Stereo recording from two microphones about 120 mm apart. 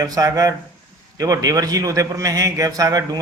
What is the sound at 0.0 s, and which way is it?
A man's voice, 30° right (ahead or behind).